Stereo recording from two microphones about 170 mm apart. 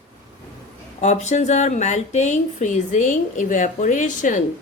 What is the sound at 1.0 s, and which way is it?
A woman's voice, 45° left (ahead or behind).